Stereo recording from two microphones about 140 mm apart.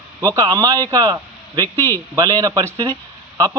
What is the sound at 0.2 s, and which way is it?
A man's voice, 25° right (ahead or behind).